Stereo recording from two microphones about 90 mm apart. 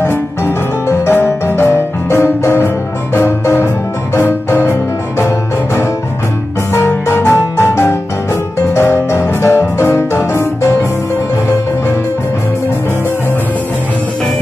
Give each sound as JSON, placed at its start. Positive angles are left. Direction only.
{"t": 0.0, "sound": "music", "side_deg": 25}
{"t": 6.7, "sound": "music", "side_deg": 25}